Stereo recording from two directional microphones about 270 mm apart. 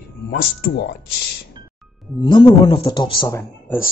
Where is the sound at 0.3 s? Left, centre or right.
Left.